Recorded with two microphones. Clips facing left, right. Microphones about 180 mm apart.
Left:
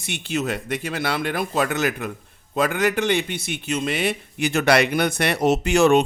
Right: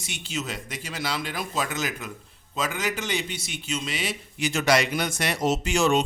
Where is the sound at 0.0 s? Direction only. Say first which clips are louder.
Left 7 dB; 60° left (ahead or behind).